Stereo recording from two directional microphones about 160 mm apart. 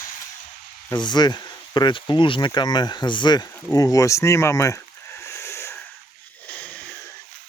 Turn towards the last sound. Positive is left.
turn(degrees=15)  # may be behind; listen again after turning